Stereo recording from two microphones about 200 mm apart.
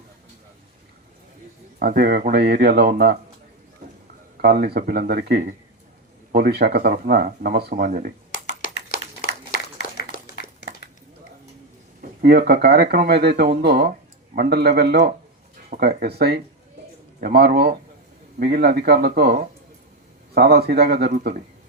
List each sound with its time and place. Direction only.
1.8 s speech: 45° right (ahead or behind)
4.4 s speech: 50° right (ahead or behind)
8.3 s a sound: 50° left (ahead or behind)
12.4 s speech: 50° right (ahead or behind)